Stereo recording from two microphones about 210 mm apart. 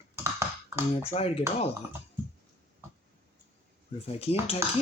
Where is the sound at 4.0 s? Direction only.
30° left (ahead or behind).